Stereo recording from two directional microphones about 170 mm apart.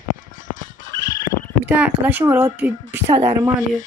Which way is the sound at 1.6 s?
10° right (ahead or behind).